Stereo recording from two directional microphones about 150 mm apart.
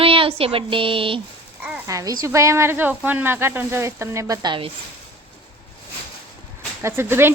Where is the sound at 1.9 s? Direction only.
20° right (ahead or behind).